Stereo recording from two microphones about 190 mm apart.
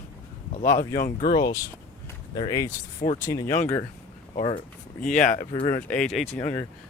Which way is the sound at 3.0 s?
45° left (ahead or behind).